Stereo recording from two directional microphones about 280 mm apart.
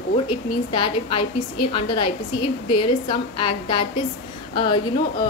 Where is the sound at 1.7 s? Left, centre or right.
Centre.